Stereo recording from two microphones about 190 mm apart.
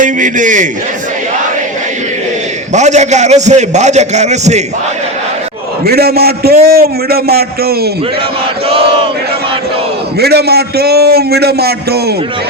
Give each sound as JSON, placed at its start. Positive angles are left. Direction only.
{"t": 0.0, "sound": "a man's voice", "side_deg": -45}
{"t": 2.7, "sound": "a man's voice", "side_deg": -40}
{"t": 5.8, "sound": "a man's voice", "side_deg": -55}
{"t": 10.2, "sound": "a man's voice", "side_deg": -55}